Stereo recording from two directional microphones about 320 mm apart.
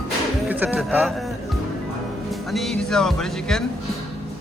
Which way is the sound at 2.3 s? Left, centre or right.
Centre.